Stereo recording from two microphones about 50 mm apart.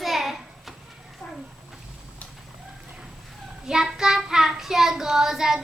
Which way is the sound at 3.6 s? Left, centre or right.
Centre.